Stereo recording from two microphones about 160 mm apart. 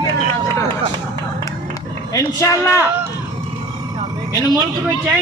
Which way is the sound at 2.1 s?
20° left (ahead or behind).